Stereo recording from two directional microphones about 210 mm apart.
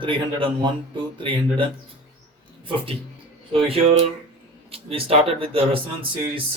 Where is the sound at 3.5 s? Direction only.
25° right (ahead or behind).